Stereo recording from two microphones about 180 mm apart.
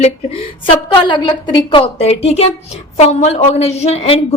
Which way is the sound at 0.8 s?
25° left (ahead or behind).